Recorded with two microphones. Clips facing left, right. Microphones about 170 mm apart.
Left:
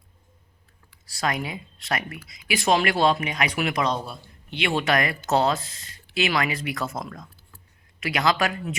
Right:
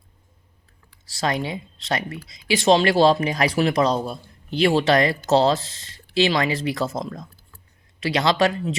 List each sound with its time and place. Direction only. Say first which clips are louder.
0.9 s speech: right 3 dB; 25° right (ahead or behind)